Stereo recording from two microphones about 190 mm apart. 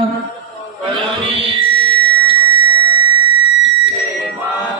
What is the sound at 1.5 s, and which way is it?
Music, 25° right (ahead or behind).